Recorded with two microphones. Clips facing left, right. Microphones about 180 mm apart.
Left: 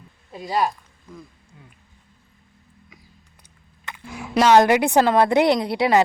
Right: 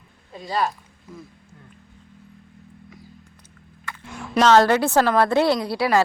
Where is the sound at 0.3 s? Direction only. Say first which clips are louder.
Left 2 dB; 15° left (ahead or behind).